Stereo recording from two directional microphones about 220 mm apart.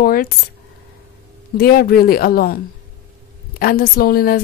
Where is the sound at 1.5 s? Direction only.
45° left (ahead or behind).